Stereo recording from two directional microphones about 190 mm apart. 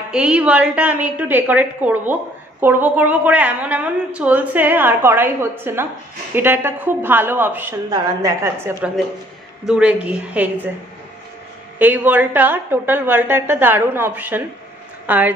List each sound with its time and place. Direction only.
0.1 s a woman's voice: 5° right (ahead or behind)
11.8 s a woman's voice: 10° right (ahead or behind)